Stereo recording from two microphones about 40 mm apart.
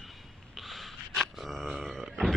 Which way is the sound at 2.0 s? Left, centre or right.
Centre.